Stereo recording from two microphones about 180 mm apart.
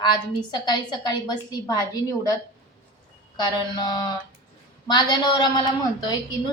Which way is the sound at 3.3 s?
25° left (ahead or behind).